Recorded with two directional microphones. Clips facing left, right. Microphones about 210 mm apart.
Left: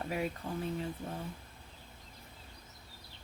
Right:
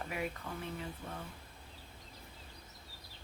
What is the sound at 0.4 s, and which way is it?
Speech, 30° left (ahead or behind).